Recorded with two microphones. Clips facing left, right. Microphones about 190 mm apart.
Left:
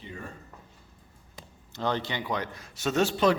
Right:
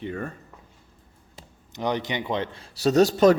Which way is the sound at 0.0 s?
60° right (ahead or behind).